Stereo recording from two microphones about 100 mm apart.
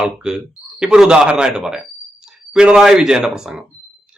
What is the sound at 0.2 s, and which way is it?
A man's voice, 10° right (ahead or behind).